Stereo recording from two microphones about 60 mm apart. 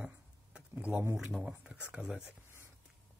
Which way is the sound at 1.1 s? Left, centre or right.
Centre.